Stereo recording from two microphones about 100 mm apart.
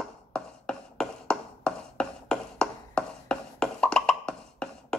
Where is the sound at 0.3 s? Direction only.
10° left (ahead or behind).